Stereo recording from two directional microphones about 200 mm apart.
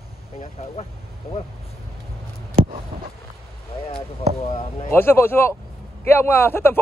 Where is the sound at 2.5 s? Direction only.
40° right (ahead or behind).